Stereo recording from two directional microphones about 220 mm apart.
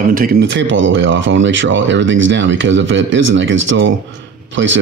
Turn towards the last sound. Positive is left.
turn(degrees=-55)  # may be behind; listen again after turning